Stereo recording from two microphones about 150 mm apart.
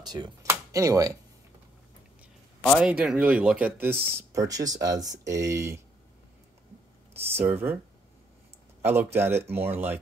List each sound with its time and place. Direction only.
0.0 s speech: 30° right (ahead or behind)
2.8 s speech: 5° right (ahead or behind)
7.2 s speech: 15° right (ahead or behind)
8.8 s speech: 15° right (ahead or behind)